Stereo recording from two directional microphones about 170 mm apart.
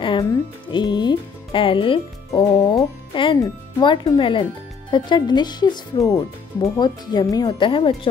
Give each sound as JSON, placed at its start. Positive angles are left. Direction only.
{"t": 0.0, "sound": "speech", "side_deg": 30}